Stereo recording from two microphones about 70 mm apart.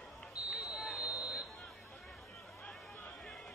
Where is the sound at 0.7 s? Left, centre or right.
Centre.